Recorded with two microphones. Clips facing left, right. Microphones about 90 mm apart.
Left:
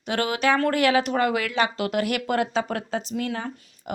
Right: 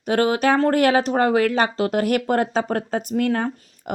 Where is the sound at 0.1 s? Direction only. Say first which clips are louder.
Right 5 dB; 40° right (ahead or behind).